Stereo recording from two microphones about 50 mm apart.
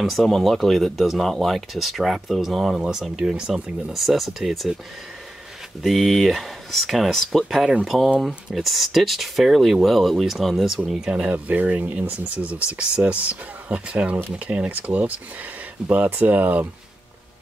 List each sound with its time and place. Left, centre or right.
0.0 s speech: centre
3.9 s speech: centre
5.8 s speech: centre; by 16.6 s right